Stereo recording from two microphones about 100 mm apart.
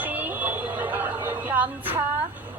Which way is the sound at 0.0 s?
15° right (ahead or behind).